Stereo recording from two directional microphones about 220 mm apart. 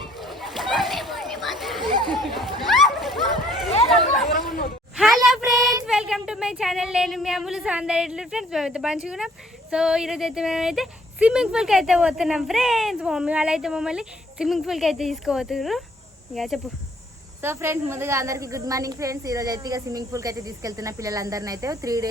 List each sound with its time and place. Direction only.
0.0 s children playing: centre (ahead or behind)
1.9 s chatter: 20° right (ahead or behind)
2.1 s a sound: centre (ahead or behind)
3.7 s chatter: 30° left (ahead or behind)
4.9 s child singing: centre (ahead or behind)
5.8 s speech: centre (ahead or behind)
17.4 s a woman's voice: 10° right (ahead or behind)